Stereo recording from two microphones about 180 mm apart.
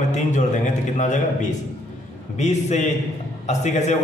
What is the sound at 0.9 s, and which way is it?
A man's voice, 45° left (ahead or behind).